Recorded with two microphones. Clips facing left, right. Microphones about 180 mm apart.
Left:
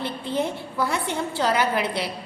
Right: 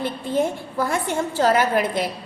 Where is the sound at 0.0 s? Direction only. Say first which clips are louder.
Right 4 dB; 45° right (ahead or behind).